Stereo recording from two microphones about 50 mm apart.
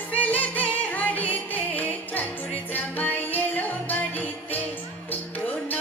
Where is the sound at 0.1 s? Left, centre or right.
Left.